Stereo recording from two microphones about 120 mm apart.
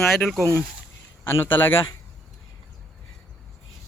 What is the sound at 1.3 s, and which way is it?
Speech, 20° left (ahead or behind).